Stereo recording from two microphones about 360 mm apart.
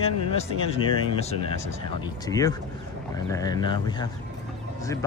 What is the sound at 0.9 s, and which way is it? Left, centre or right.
Speech, centre.